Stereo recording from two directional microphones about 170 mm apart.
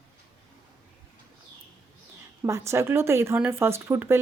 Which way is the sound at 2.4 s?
15° right (ahead or behind).